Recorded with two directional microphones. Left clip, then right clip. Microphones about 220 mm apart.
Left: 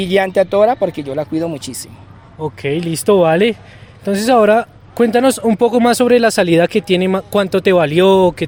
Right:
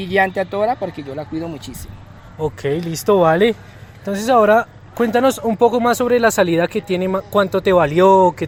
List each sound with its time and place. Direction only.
0.0 s speech: 50° left (ahead or behind)
2.4 s speech: 15° left (ahead or behind)
2.9 s speech: 50° left (ahead or behind)
3.2 s speech: 30° left (ahead or behind)